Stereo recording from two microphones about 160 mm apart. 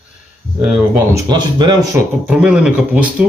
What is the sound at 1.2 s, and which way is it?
Speech, 25° right (ahead or behind).